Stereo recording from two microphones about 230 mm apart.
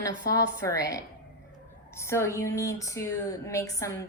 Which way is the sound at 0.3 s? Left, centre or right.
Centre.